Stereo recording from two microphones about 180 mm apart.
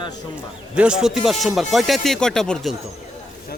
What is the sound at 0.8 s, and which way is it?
Speech, 5° right (ahead or behind).